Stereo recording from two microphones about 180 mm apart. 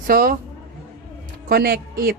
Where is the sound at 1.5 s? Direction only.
60° right (ahead or behind).